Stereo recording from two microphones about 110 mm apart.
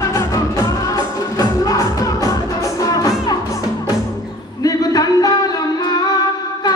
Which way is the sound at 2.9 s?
35° left (ahead or behind).